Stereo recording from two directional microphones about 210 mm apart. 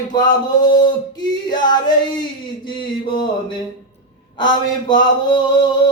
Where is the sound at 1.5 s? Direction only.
20° left (ahead or behind).